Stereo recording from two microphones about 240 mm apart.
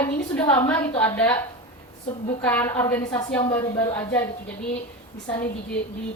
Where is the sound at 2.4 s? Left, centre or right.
Centre.